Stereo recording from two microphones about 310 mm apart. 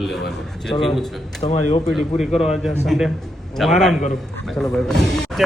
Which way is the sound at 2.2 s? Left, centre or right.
Centre.